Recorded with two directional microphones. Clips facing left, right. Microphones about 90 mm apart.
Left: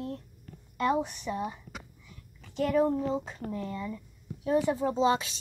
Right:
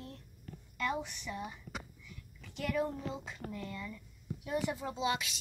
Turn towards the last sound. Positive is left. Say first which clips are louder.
# left 9 dB
turn(degrees=35)  # may be behind; listen again after turning